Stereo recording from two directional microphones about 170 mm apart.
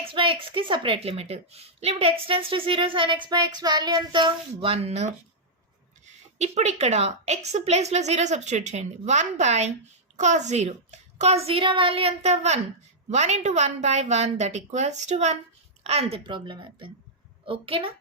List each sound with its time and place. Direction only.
0.0 s a woman's voice: 30° right (ahead or behind)